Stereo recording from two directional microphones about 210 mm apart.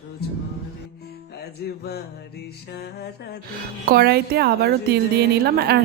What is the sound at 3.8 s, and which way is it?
A woman's voice, 45° right (ahead or behind).